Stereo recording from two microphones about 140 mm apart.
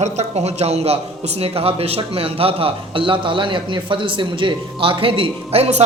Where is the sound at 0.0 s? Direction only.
50° right (ahead or behind).